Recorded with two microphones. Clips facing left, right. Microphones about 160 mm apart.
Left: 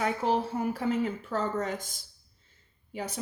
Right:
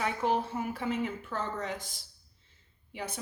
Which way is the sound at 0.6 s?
40° left (ahead or behind).